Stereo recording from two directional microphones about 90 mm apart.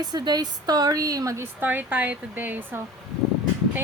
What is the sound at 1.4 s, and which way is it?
Speech, 20° right (ahead or behind).